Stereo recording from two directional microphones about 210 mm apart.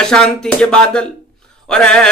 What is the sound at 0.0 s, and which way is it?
A man's voice, 5° left (ahead or behind).